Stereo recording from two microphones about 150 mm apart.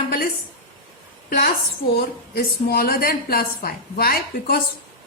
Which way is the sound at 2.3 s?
90° left.